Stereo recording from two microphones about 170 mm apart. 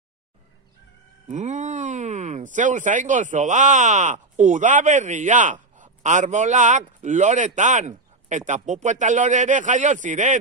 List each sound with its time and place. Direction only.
1.3 s speech: 45° right (ahead or behind)